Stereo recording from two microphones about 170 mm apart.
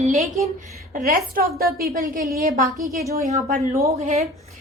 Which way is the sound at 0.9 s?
55° right (ahead or behind).